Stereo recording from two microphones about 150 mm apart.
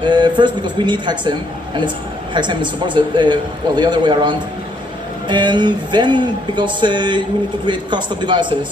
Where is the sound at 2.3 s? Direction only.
30° right (ahead or behind).